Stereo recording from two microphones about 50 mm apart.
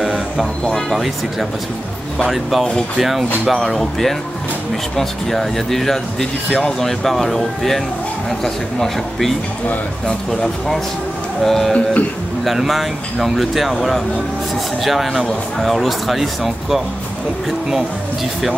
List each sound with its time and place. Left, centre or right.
0.0 s music: centre
0.8 s speech: centre
2.2 s speech: centre
11.4 s speech: centre
11.7 s music: left
12.4 s speech: centre